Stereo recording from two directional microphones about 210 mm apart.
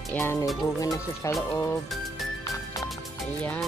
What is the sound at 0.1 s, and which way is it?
Speech, 10° left (ahead or behind).